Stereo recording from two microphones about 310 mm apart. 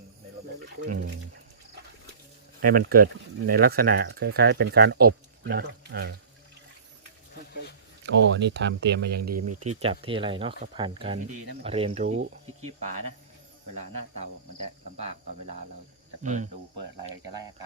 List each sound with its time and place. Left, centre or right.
0.9 s speech: right
2.6 s speech: right
8.0 s speech: right
9.0 s speech: right
9.8 s speech: centre
16.2 s speech: right